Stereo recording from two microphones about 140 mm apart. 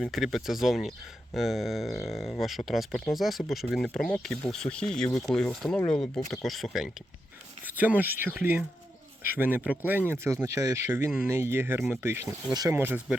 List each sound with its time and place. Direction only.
0.0 s speech: centre (ahead or behind)
7.8 s speech: 10° right (ahead or behind)